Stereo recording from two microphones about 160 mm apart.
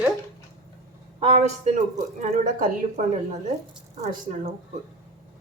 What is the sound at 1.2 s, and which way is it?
Speech, 40° right (ahead or behind).